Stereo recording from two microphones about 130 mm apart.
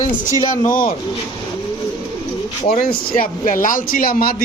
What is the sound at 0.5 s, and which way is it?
Speech, 90° left.